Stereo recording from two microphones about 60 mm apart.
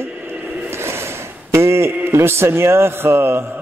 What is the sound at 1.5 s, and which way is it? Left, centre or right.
A man's voice, right.